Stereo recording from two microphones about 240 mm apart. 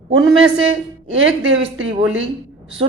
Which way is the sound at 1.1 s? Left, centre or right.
Right.